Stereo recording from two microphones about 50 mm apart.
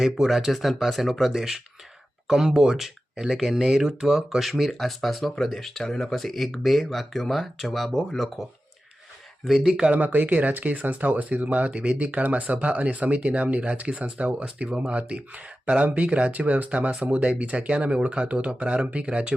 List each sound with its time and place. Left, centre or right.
0.0 s speech: centre
7.9 s speech: centre
9.4 s speech: centre
9.9 s speech: right